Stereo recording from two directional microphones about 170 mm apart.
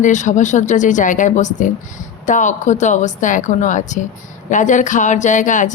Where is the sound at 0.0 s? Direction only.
45° left (ahead or behind).